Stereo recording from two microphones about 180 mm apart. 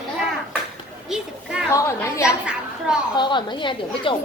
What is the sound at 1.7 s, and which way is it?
A woman's voice, 15° left (ahead or behind).